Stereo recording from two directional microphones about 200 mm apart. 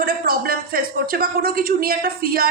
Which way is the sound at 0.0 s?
50° right (ahead or behind).